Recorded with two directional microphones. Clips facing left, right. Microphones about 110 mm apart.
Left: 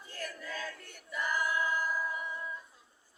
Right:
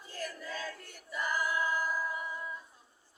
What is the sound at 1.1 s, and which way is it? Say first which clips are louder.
Choir: even; 20° right (ahead or behind).